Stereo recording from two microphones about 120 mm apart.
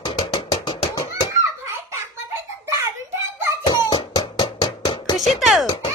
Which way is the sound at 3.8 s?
45° left (ahead or behind).